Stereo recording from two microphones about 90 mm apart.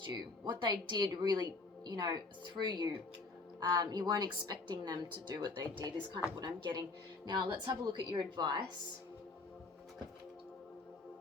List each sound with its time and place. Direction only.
0.0 s a woman's voice: 55° right (ahead or behind)